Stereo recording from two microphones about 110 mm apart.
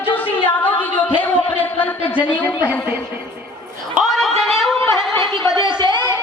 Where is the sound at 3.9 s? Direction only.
Centre (ahead or behind).